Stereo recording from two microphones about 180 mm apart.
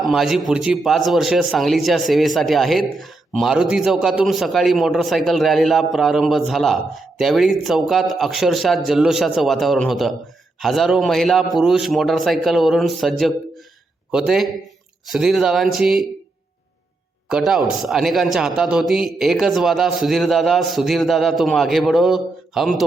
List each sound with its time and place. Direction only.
0.0 s speech: centre (ahead or behind)
17.2 s speech: 5° right (ahead or behind)